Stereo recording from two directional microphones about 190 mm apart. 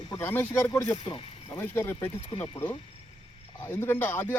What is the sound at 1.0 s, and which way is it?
Speech, 25° left (ahead or behind).